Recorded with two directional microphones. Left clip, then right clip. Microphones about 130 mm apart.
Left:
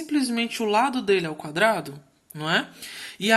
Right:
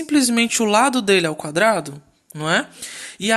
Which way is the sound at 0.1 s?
60° right (ahead or behind).